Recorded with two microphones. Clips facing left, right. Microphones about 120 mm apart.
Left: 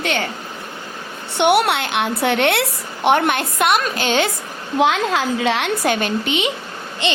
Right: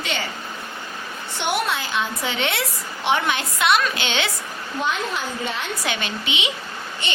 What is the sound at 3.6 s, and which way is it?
Speech, 45° left (ahead or behind).